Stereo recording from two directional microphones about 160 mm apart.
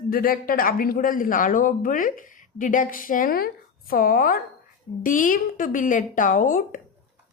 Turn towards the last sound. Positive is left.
turn(degrees=55)  # may be behind; listen again after turning